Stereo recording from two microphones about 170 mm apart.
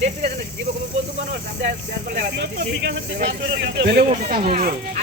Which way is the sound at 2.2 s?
90° right.